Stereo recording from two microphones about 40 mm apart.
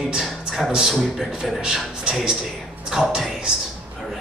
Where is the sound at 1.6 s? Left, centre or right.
Right.